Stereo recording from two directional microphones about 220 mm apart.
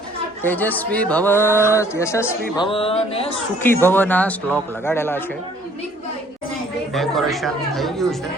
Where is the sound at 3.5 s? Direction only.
10° left (ahead or behind).